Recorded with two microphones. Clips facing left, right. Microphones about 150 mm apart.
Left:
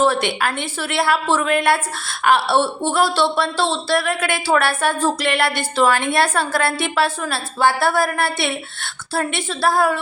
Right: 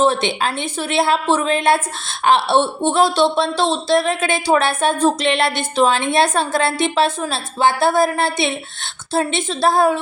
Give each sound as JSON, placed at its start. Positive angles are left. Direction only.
{"t": 0.0, "sound": "a woman's voice", "side_deg": -20}